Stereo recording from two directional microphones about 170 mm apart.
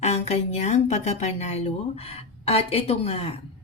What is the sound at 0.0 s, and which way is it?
A woman's voice, 40° left (ahead or behind).